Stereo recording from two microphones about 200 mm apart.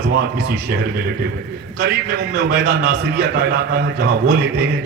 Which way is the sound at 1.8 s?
55° right (ahead or behind).